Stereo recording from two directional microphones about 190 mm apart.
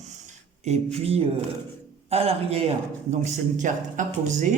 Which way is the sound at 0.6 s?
35° right (ahead or behind).